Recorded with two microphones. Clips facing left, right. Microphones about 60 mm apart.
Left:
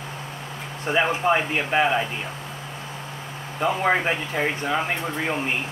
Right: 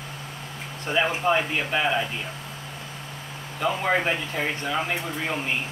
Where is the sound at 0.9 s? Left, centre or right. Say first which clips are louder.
Left 2 dB; left.